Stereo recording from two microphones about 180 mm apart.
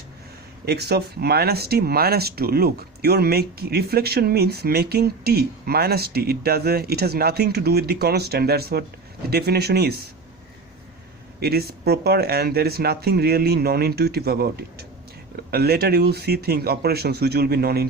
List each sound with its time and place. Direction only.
0.6 s speech: 65° right (ahead or behind)
11.3 s speech: 60° right (ahead or behind)